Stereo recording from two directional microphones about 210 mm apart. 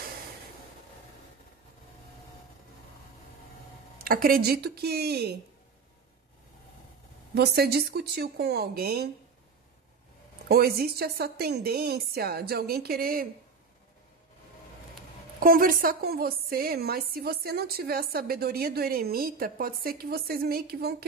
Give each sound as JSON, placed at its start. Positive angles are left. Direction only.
{"t": 4.0, "sound": "a woman's voice", "side_deg": -45}
{"t": 7.3, "sound": "a woman's voice", "side_deg": -50}
{"t": 10.5, "sound": "a woman's voice", "side_deg": -45}
{"t": 15.4, "sound": "a woman's voice", "side_deg": -45}